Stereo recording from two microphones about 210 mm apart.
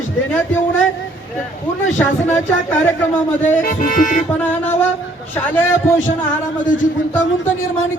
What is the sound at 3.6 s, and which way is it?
Music, 40° left (ahead or behind).